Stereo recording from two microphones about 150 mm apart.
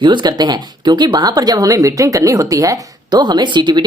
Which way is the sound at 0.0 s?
30° right (ahead or behind).